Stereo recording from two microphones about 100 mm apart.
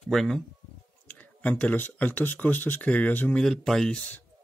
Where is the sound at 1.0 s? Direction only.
15° left (ahead or behind).